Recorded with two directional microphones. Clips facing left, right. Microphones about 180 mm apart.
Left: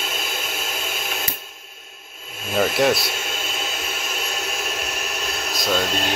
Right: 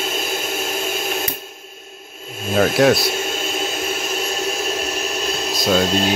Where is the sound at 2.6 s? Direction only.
Centre (ahead or behind).